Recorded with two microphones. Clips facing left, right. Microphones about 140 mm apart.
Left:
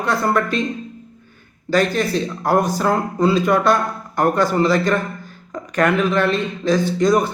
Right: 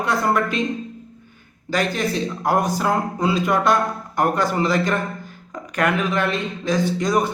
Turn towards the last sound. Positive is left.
turn(degrees=-15)  # may be behind; listen again after turning